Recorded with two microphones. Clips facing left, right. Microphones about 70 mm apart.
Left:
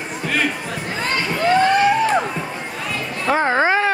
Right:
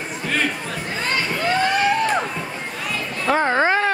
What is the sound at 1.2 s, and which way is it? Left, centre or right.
Crowd, centre.